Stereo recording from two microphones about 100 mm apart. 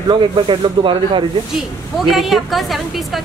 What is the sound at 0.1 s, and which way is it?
Speech, 55° right (ahead or behind).